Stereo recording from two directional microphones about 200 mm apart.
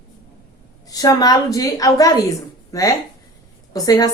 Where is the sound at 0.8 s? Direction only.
20° left (ahead or behind).